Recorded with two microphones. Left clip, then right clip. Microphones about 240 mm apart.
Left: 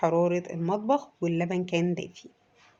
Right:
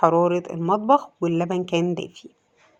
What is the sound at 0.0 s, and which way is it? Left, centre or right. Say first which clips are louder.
Speech: right 6 dB; right.